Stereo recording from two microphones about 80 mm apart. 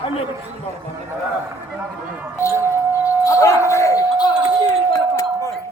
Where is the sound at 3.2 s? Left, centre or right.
Left.